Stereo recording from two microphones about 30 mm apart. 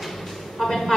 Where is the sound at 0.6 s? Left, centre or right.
Centre.